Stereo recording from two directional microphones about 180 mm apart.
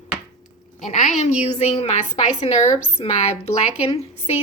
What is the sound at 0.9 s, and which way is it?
A woman's voice, 40° left (ahead or behind).